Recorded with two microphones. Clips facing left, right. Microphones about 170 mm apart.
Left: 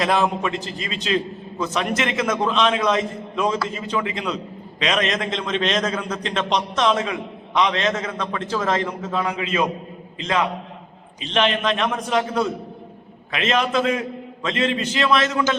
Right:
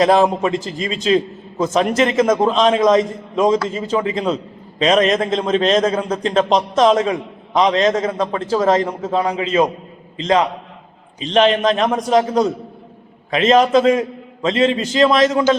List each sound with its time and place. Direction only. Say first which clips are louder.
0.0 s a man's voice: right 7 dB; 35° right (ahead or behind)
3.7 s a man's voice: right 6 dB; 25° right (ahead or behind)
11.2 s a man's voice: right 7 dB; 35° right (ahead or behind)